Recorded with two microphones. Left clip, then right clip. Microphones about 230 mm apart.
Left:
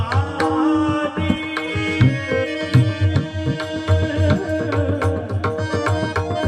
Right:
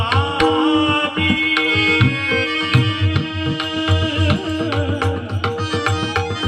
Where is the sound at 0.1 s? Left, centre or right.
Centre.